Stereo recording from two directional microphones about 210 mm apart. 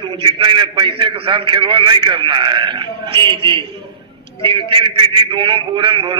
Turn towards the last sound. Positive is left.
turn(degrees=-25)  # may be behind; listen again after turning